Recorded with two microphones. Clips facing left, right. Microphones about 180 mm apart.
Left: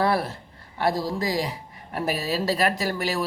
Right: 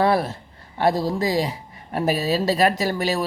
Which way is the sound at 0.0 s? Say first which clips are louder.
Right 4 dB; 20° right (ahead or behind).